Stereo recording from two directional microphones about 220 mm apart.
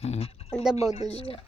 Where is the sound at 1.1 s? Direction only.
25° left (ahead or behind).